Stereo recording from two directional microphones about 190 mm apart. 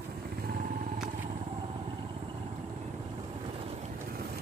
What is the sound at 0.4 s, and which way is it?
Vehicle, 50° right (ahead or behind).